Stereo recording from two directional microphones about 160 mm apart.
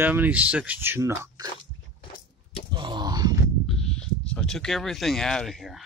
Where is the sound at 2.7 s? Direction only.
30° right (ahead or behind).